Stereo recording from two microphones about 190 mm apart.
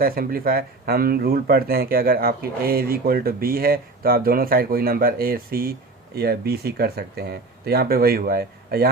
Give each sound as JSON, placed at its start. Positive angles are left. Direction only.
{"t": 0.0, "sound": "speech", "side_deg": -50}